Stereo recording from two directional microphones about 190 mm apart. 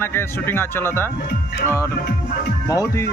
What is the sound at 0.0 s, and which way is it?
Speech, 10° left (ahead or behind).